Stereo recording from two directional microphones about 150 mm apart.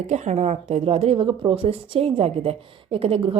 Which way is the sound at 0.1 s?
50° right (ahead or behind).